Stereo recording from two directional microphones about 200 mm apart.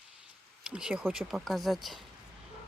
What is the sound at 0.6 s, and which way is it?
Speech, 5° right (ahead or behind).